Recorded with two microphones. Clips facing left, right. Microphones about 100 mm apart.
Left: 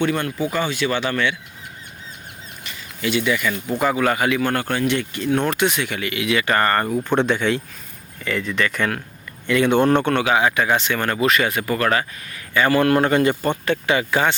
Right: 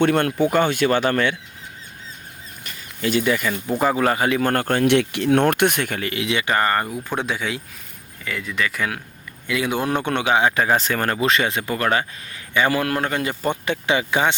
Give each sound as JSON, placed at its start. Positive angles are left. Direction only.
{"t": 0.0, "sound": "speech", "side_deg": -60}
{"t": 2.6, "sound": "a sound", "side_deg": -40}
{"t": 3.8, "sound": "speech", "side_deg": -30}
{"t": 4.9, "sound": "speech", "side_deg": -80}
{"t": 6.5, "sound": "speech", "side_deg": -10}
{"t": 12.5, "sound": "speech", "side_deg": -10}
{"t": 12.9, "sound": "speech", "side_deg": 0}
{"t": 13.5, "sound": "speech", "side_deg": -20}